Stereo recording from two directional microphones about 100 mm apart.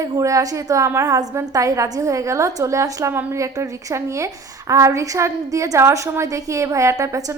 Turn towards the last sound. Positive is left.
turn(degrees=-30)  # may be behind; listen again after turning